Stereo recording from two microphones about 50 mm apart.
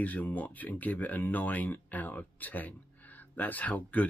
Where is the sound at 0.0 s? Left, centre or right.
Left.